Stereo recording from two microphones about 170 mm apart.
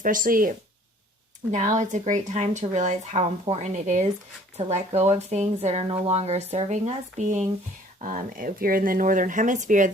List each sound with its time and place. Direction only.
0.0 s speech: 50° right (ahead or behind)
1.5 s speech: 45° right (ahead or behind)